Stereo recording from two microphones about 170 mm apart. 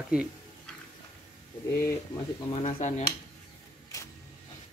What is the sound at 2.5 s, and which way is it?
Speech, 40° left (ahead or behind).